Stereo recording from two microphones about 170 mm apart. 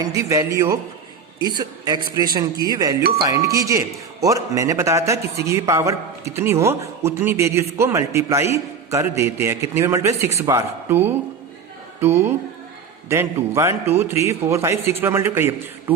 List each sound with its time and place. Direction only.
0.0 s a man's voice: 20° right (ahead or behind)
13.5 s a man's voice: 15° right (ahead or behind)